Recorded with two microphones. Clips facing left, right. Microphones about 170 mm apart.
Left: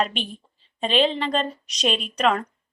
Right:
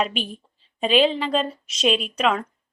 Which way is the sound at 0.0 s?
5° right (ahead or behind).